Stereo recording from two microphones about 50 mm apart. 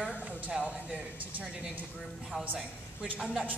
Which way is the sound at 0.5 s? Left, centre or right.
Centre.